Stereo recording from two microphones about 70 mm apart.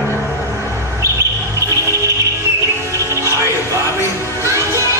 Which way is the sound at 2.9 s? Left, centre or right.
Right.